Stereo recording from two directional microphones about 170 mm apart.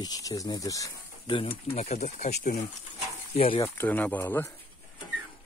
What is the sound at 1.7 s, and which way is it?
Speech, 40° left (ahead or behind).